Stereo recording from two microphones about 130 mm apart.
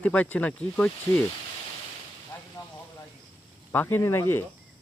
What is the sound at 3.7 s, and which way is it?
Speech, 15° left (ahead or behind).